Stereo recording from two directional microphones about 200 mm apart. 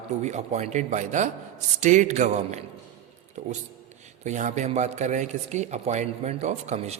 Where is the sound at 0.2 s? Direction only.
35° right (ahead or behind).